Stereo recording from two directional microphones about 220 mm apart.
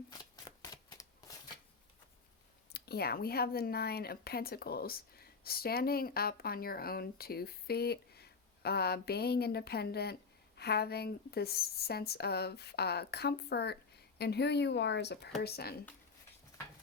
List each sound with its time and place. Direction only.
0.4 s shuffling cards: 15° left (ahead or behind)
2.7 s speech: 45° left (ahead or behind)